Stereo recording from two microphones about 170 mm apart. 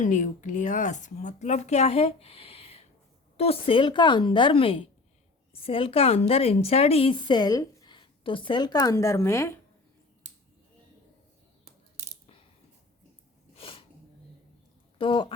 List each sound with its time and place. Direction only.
0.0 s a woman's voice: 45° left (ahead or behind); by 9.6 s 15° left (ahead or behind)
13.6 s a sound: 35° left (ahead or behind)
14.9 s speech: 30° left (ahead or behind)